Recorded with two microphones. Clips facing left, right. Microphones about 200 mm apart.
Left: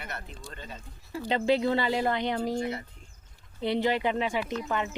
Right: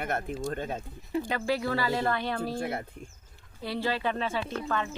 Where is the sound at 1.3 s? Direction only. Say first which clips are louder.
Left 7 dB; 20° left (ahead or behind).